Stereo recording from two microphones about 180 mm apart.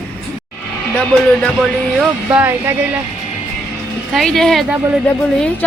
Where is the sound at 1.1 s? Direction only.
5° left (ahead or behind).